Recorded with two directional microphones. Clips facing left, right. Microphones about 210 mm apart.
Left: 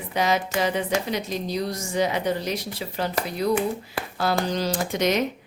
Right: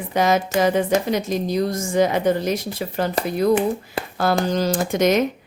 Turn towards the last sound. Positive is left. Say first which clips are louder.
# right 5 dB
turn(degrees=-50)  # may be behind; listen again after turning